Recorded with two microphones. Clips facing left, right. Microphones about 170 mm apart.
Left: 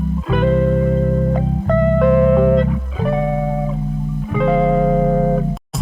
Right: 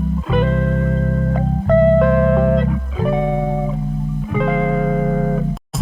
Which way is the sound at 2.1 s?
5° left (ahead or behind).